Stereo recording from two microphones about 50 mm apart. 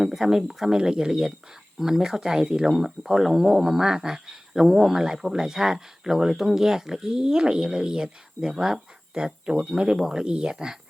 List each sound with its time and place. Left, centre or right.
0.0 s speech: centre